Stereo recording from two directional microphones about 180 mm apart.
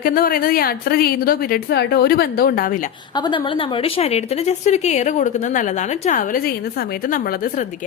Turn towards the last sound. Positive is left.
turn(degrees=45)  # may be behind; listen again after turning